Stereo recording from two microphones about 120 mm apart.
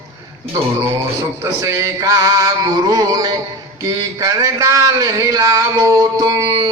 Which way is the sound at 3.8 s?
30° right (ahead or behind).